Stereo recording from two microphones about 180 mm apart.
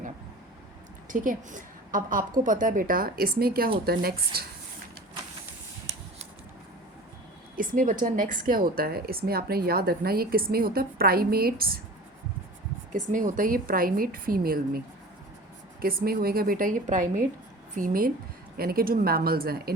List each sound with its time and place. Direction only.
1.0 s a woman's voice: 45° right (ahead or behind)
7.5 s a woman's voice: 50° right (ahead or behind)
12.9 s a woman's voice: 45° right (ahead or behind)
15.8 s a woman's voice: 55° right (ahead or behind)